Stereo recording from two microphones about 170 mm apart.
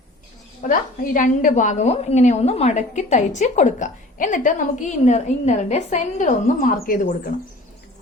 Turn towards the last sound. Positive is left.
turn(degrees=55)  # may be behind; listen again after turning